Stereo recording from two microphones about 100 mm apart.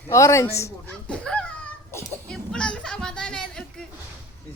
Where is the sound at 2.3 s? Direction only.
5° left (ahead or behind).